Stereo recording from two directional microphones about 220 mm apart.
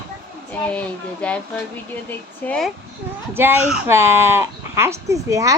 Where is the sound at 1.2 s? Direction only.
5° left (ahead or behind).